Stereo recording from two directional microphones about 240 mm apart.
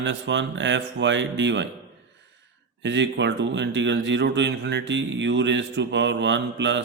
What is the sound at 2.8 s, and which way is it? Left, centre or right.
Speech, right.